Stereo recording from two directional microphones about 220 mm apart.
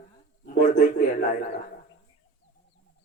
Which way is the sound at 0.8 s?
35° left (ahead or behind).